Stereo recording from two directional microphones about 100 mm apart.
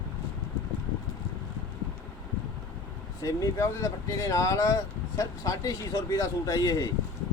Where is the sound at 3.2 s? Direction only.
35° left (ahead or behind).